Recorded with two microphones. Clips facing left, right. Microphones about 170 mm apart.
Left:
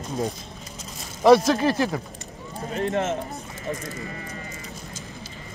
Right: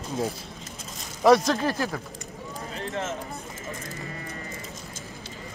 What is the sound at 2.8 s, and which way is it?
Speech, 35° left (ahead or behind).